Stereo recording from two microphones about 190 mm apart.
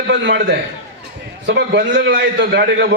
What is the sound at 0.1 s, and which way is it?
A man's voice, 75° right (ahead or behind).